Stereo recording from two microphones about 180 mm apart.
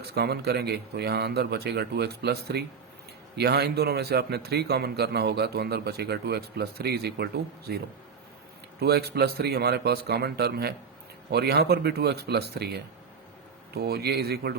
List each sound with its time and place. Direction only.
0.1 s speech: 65° right (ahead or behind)
8.8 s speech: 65° right (ahead or behind)